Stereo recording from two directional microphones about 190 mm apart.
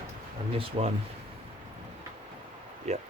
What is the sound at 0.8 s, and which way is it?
Speech, 30° right (ahead or behind).